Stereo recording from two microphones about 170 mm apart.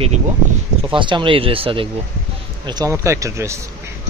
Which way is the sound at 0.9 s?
30° right (ahead or behind).